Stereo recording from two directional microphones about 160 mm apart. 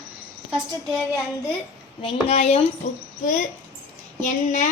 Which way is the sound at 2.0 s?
45° left (ahead or behind).